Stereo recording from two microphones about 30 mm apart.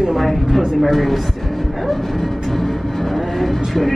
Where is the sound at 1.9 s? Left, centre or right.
Centre.